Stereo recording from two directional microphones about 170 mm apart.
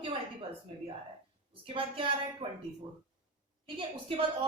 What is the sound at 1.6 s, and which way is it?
Speech, 30° right (ahead or behind).